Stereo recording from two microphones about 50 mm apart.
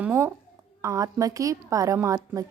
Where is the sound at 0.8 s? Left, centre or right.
Right.